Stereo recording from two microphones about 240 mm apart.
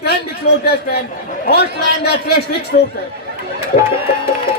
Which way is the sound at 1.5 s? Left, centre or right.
Left.